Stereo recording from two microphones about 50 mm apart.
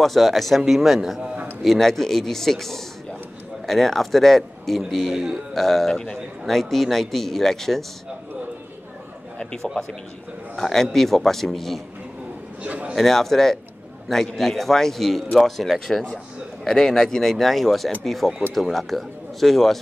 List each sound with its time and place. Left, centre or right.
0.0 s a man's voice: centre
1.6 s a man's voice: centre
5.5 s a man's voice: centre
9.4 s a man's voice: centre
12.6 s a man's voice: right
12.9 s a man's voice: centre